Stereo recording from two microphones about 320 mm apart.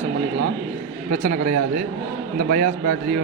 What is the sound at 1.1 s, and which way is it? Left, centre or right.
A man's voice, right.